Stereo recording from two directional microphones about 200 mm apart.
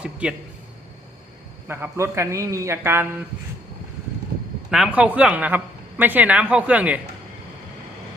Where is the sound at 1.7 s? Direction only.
10° right (ahead or behind).